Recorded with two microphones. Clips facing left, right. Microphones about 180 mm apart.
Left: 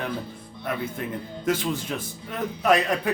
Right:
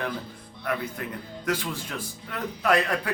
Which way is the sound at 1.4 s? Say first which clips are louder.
Left 4 dB; 20° left (ahead or behind).